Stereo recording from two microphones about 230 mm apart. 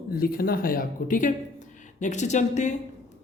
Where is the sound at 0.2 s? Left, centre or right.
Left.